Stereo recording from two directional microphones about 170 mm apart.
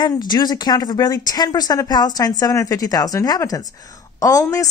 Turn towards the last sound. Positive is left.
turn(degrees=20)  # may be behind; listen again after turning